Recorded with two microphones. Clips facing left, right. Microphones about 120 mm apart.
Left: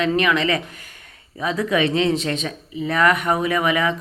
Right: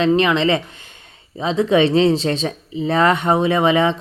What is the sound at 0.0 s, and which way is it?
Speech, 30° right (ahead or behind).